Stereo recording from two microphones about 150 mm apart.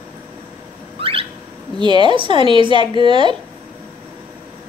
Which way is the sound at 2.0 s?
35° right (ahead or behind).